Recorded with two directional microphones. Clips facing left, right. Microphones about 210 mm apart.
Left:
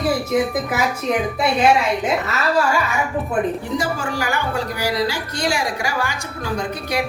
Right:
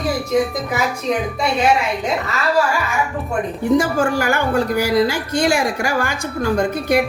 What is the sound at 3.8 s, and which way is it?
A woman's voice, 50° right (ahead or behind).